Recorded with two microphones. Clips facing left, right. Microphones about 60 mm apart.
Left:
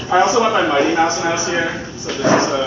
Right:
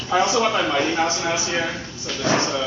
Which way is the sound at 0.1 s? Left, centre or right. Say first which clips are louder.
Left 5 dB; left.